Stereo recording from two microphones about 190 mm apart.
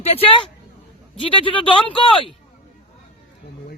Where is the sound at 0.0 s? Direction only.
30° left (ahead or behind).